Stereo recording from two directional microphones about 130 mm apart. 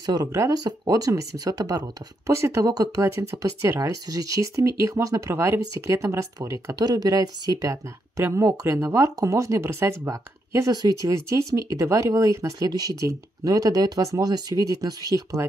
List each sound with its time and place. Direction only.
0.0 s speech: 30° right (ahead or behind)